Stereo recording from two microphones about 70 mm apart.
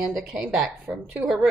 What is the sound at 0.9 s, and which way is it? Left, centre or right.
Speech, right.